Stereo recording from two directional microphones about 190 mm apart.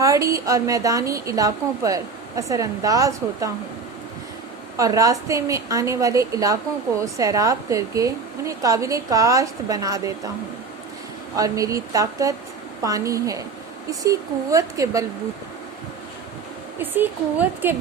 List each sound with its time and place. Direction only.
0.0 s a woman's voice: 15° right (ahead or behind)
4.8 s a woman's voice: 15° right (ahead or behind)
11.3 s a woman's voice: 20° right (ahead or behind)
16.7 s a woman's voice: 10° right (ahead or behind)